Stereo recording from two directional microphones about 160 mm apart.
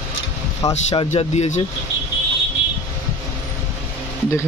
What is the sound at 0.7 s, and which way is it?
Speech, 40° left (ahead or behind).